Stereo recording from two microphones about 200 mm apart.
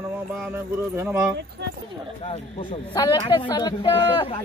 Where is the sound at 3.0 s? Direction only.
20° left (ahead or behind).